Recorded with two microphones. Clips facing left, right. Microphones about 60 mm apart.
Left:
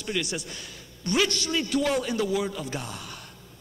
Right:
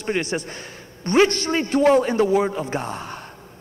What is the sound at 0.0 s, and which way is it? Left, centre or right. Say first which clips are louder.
Speech: right 6 dB; right.